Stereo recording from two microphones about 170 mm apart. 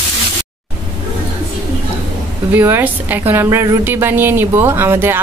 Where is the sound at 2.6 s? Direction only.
15° right (ahead or behind).